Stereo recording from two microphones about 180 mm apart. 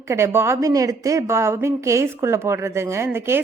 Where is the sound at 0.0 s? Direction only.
15° right (ahead or behind).